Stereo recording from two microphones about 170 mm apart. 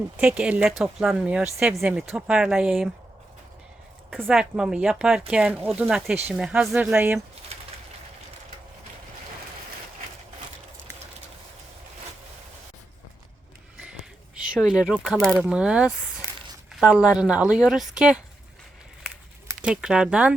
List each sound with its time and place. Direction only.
0.2 s speech: 5° right (ahead or behind)
4.2 s speech: 5° right (ahead or behind)
7.5 s bird: 35° right (ahead or behind)
14.5 s speech: 5° right (ahead or behind)
19.6 s speech: 5° right (ahead or behind)